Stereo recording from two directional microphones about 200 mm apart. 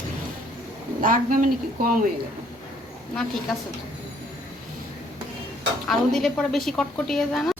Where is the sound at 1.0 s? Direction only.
45° right (ahead or behind).